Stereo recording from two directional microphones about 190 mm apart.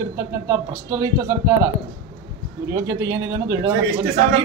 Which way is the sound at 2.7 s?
15° right (ahead or behind).